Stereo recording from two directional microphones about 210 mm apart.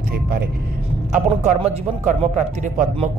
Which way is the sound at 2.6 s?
35° right (ahead or behind).